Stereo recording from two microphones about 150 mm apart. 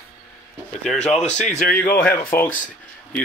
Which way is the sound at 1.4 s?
55° left (ahead or behind).